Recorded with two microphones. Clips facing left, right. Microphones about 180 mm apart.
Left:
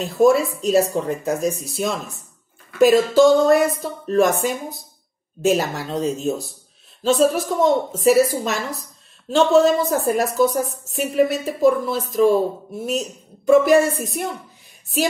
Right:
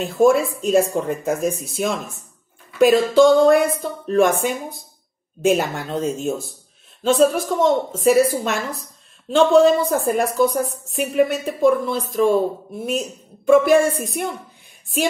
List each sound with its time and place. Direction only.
0.0 s a woman's voice: centre (ahead or behind)